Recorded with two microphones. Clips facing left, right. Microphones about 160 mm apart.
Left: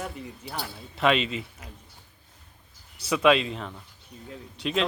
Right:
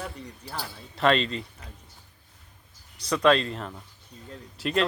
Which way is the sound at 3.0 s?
5° left (ahead or behind).